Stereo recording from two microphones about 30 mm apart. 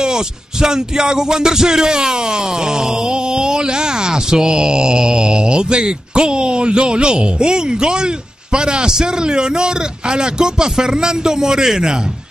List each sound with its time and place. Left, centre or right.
0.0 s music: right